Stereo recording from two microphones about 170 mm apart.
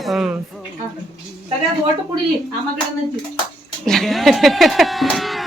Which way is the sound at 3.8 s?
Centre (ahead or behind).